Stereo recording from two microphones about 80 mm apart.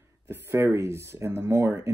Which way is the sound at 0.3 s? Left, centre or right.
Right.